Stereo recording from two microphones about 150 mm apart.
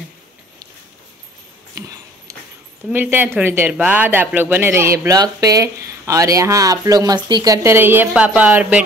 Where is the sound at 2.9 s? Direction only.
15° right (ahead or behind).